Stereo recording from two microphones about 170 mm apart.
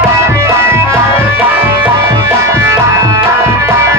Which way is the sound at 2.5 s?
20° right (ahead or behind).